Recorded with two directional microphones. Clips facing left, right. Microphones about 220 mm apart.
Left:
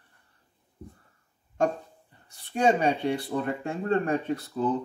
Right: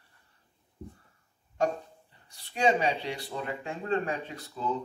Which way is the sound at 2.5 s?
50° left (ahead or behind).